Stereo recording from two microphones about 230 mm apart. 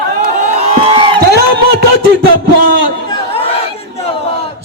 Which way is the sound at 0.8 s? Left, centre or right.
Right.